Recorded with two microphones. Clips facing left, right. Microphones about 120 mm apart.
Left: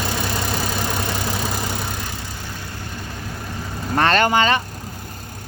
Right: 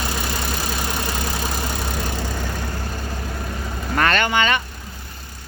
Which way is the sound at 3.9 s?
30° left (ahead or behind).